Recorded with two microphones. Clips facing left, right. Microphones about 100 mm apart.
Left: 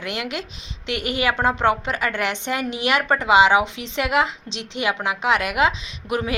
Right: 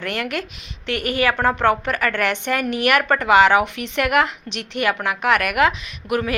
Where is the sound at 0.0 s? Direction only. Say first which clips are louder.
Right 3 dB; 15° left (ahead or behind).